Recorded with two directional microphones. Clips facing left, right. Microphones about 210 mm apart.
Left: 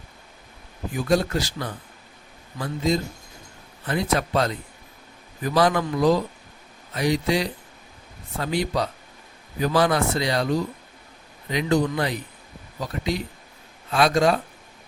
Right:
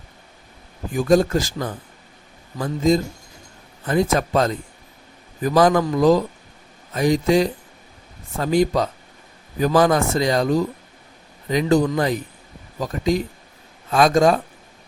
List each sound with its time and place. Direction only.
0.9 s speech: 45° right (ahead or behind)
11.5 s speech: 45° right (ahead or behind)